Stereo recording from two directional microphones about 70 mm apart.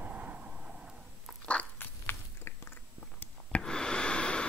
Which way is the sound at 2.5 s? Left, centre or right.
Left.